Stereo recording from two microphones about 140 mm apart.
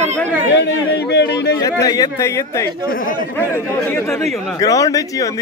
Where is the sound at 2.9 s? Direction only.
80° left.